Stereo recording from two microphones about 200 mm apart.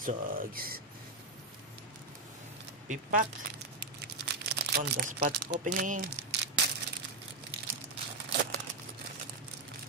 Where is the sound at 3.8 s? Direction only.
55° right (ahead or behind).